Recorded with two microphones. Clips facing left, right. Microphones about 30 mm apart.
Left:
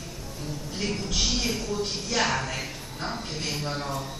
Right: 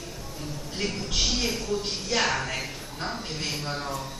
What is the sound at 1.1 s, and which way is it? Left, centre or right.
A woman's voice, centre.